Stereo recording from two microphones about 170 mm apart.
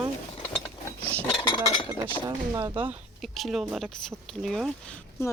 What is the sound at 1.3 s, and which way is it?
Cutlery, 30° left (ahead or behind).